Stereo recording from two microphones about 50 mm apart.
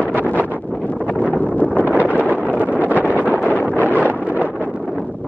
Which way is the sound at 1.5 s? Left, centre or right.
Left.